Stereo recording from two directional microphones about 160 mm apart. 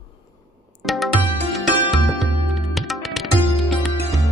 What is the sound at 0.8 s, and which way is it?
Music, centre (ahead or behind).